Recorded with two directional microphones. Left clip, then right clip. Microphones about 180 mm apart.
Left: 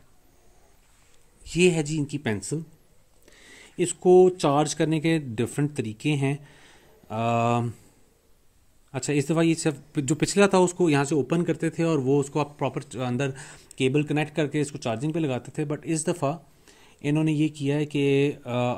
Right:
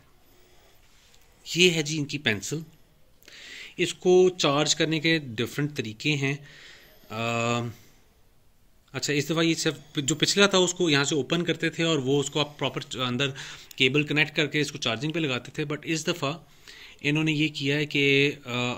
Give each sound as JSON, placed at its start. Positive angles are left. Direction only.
{"t": 1.4, "sound": "a man's voice", "side_deg": 55}
{"t": 8.9, "sound": "a man's voice", "side_deg": 50}